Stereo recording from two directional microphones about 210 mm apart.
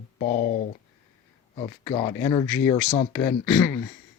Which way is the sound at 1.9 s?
15° left (ahead or behind).